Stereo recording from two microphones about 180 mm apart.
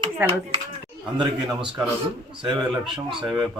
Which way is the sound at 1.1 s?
25° right (ahead or behind).